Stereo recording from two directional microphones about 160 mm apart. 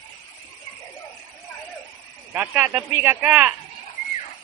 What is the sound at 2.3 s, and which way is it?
Speech, 10° right (ahead or behind).